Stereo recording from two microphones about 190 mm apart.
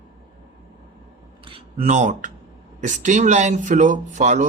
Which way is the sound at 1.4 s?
30° right (ahead or behind).